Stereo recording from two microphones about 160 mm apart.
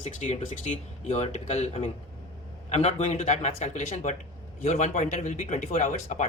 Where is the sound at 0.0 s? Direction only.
45° left (ahead or behind).